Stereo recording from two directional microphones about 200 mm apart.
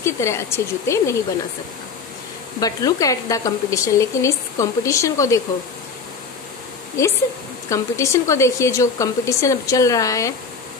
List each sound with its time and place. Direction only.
0.0 s a woman's voice: 15° left (ahead or behind)
2.6 s a woman's voice: 15° left (ahead or behind)
7.7 s a woman's voice: 15° left (ahead or behind)